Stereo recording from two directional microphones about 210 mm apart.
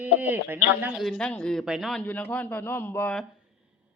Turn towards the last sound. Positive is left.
turn(degrees=10)  # may be behind; listen again after turning